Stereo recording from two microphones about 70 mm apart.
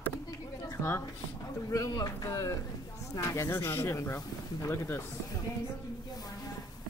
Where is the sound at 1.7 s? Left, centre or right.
Left.